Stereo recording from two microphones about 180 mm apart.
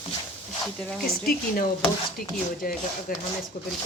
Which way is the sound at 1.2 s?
55° left (ahead or behind).